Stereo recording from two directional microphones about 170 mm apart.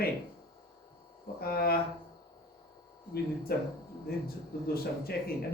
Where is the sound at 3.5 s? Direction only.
60° left (ahead or behind).